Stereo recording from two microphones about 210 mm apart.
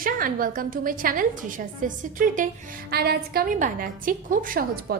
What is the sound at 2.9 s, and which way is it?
A woman's voice, 50° right (ahead or behind).